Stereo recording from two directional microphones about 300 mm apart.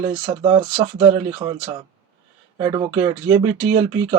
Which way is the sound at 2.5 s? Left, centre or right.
Centre.